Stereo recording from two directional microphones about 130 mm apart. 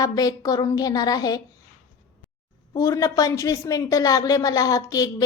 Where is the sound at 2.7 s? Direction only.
25° left (ahead or behind).